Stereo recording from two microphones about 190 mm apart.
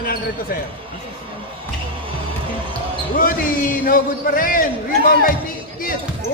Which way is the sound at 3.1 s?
45° left (ahead or behind).